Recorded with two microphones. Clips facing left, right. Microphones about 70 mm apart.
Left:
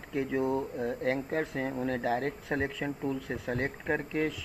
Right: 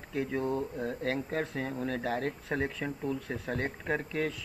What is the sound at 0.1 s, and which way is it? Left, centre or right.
Speech, centre.